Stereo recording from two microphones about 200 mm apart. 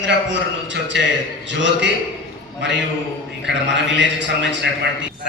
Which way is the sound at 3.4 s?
65° right (ahead or behind).